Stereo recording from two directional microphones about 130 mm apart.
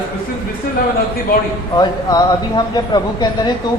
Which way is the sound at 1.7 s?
30° left (ahead or behind).